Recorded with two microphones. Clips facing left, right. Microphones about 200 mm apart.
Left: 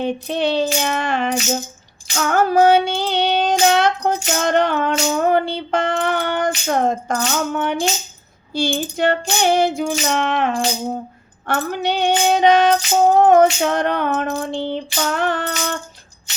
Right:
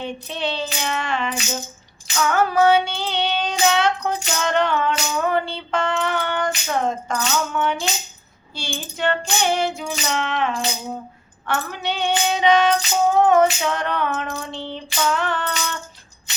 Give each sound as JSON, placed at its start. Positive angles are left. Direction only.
{"t": 0.0, "sound": "music", "side_deg": 45}
{"t": 2.1, "sound": "child singing", "side_deg": 45}
{"t": 5.1, "sound": "female singing", "side_deg": 40}
{"t": 6.7, "sound": "music", "side_deg": 45}
{"t": 9.0, "sound": "female singing", "side_deg": 40}
{"t": 9.7, "sound": "music", "side_deg": 50}